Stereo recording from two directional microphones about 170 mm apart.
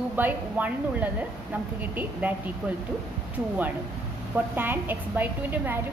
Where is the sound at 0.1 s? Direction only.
10° right (ahead or behind).